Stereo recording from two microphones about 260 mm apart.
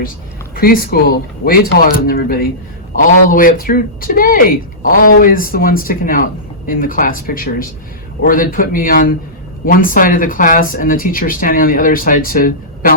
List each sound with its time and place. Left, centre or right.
0.5 s speech: left